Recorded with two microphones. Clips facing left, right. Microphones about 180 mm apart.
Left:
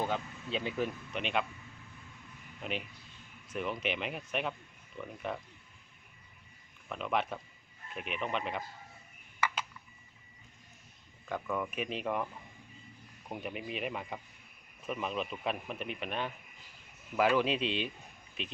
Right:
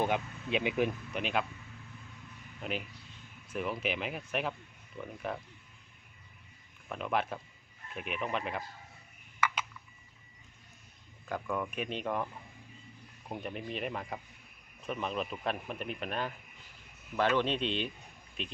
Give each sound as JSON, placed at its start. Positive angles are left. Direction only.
{"t": 0.0, "sound": "speech", "side_deg": -15}
{"t": 1.1, "sound": "a man's voice", "side_deg": 0}
{"t": 2.6, "sound": "a man's voice", "side_deg": 0}
{"t": 6.8, "sound": "a man's voice", "side_deg": 0}
{"t": 11.3, "sound": "a man's voice", "side_deg": 0}